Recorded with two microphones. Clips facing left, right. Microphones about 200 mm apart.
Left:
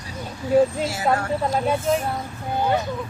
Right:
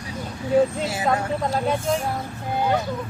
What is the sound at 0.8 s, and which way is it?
Speech, 20° right (ahead or behind).